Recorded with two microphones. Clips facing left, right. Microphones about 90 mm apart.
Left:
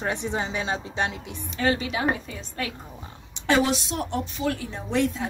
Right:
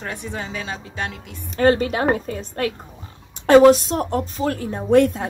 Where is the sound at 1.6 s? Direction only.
45° right (ahead or behind).